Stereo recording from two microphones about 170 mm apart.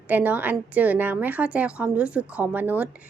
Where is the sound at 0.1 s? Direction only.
10° right (ahead or behind).